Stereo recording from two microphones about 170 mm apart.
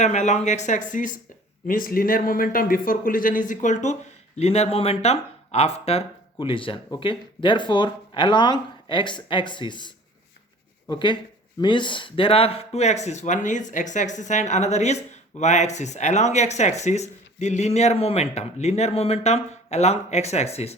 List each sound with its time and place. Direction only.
0.0 s speech: 45° left (ahead or behind)